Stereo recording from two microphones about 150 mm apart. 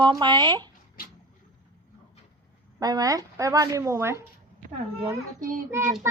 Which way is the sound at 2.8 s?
25° right (ahead or behind).